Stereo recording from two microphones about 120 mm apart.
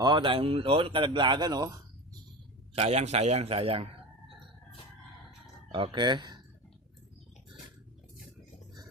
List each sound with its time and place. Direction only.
0.0 s speech: 40° right (ahead or behind)
2.7 s a man's voice: 65° right (ahead or behind)
5.7 s speech: 40° right (ahead or behind)